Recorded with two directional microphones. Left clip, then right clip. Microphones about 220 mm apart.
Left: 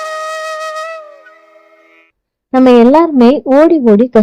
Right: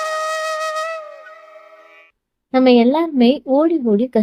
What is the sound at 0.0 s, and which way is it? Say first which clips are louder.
Wind instrument: left 1 dB; centre (ahead or behind).